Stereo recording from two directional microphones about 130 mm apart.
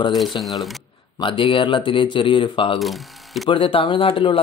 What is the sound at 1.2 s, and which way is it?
A man's voice, 40° left (ahead or behind).